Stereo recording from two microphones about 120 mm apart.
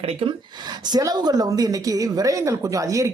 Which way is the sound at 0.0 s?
55° right (ahead or behind).